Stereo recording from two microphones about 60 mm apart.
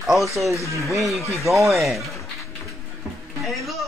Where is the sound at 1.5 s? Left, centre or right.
Right.